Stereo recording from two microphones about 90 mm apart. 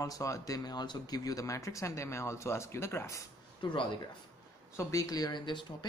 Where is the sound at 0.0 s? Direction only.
40° left (ahead or behind).